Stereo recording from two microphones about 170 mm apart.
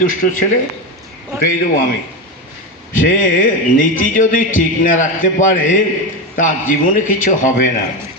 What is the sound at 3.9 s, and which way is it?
A man's voice, 50° left (ahead or behind).